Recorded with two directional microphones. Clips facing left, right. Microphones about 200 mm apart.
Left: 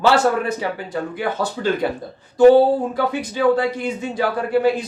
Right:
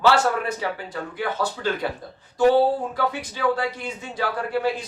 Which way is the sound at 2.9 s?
20° left (ahead or behind).